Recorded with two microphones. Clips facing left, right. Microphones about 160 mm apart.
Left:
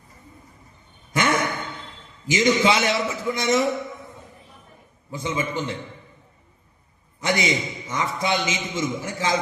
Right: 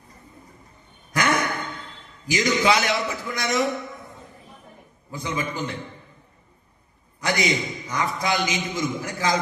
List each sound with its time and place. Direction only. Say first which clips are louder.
1.1 s a sound: left 1 dB; 25° left (ahead or behind)
2.2 s a man's voice: left 2 dB; 25° left (ahead or behind)
5.1 s a man's voice: left 2 dB; 25° left (ahead or behind)
7.2 s a man's voice: left 1 dB; 25° left (ahead or behind)